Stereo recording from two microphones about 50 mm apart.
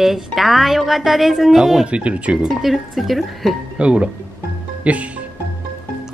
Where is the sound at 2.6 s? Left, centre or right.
Centre.